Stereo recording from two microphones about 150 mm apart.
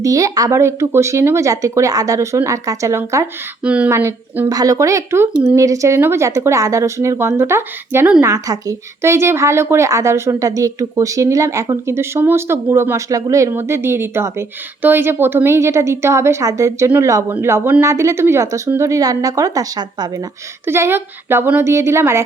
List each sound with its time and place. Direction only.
0.0 s speech: 20° right (ahead or behind)
3.6 s a woman's voice: 10° right (ahead or behind)
3.9 s a woman's voice: 20° right (ahead or behind)